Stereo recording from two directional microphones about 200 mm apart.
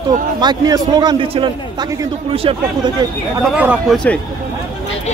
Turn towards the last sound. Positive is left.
turn(degrees=-5)  # may be behind; listen again after turning